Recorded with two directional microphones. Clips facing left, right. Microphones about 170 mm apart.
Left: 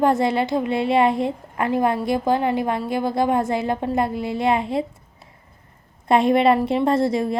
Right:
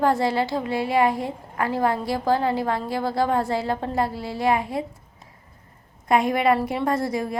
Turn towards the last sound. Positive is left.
turn(degrees=25)  # may be behind; listen again after turning